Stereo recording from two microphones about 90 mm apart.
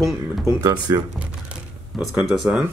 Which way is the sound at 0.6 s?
50° right (ahead or behind).